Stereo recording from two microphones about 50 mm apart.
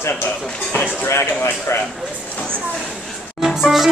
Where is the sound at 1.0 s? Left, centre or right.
Left.